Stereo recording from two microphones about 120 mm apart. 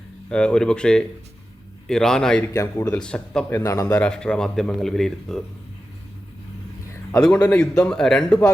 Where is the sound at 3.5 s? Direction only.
25° left (ahead or behind).